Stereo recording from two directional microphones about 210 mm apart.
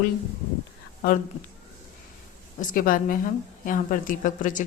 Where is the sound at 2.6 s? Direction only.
40° left (ahead or behind).